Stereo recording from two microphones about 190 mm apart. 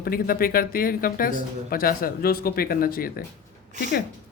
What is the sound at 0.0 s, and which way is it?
Speech, 50° left (ahead or behind).